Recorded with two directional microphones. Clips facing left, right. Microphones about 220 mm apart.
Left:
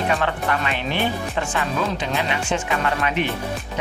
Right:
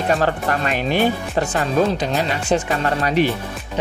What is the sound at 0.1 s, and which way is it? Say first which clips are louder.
Speech: right 3 dB; 40° right (ahead or behind).